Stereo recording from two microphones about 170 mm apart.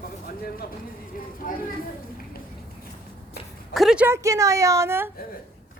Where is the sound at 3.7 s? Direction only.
5° right (ahead or behind).